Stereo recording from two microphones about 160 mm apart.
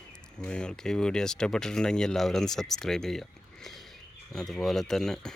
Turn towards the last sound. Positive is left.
turn(degrees=5)  # may be behind; listen again after turning